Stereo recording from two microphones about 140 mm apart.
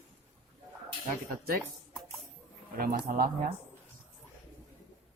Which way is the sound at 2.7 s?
90° right.